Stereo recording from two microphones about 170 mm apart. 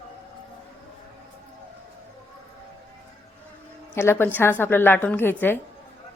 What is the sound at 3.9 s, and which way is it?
A woman's voice, 15° left (ahead or behind).